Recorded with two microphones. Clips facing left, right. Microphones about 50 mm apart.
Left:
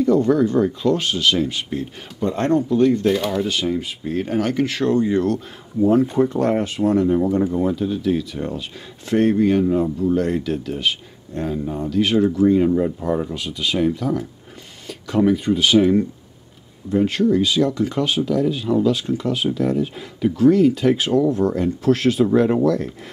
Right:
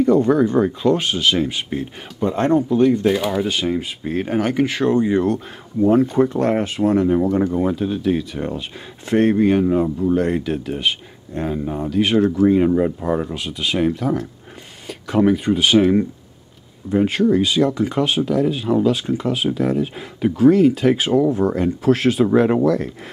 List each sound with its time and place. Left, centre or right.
0.0 s speech: right
3.7 s speech: right
5.8 s speech: right
13.7 s speech: right
14.9 s speech: centre